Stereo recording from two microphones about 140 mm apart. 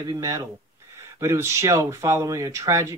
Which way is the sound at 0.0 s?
25° right (ahead or behind).